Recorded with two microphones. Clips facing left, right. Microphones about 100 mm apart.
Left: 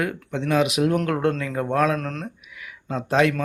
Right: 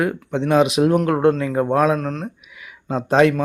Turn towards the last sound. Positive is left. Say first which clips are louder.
# right 5 dB
turn(degrees=-30)  # may be behind; listen again after turning